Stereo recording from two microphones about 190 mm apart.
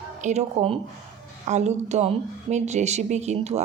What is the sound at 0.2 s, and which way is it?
Speech, 35° right (ahead or behind).